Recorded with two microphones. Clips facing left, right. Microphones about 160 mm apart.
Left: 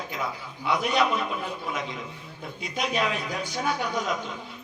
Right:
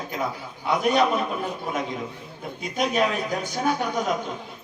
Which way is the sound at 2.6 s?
50° right (ahead or behind).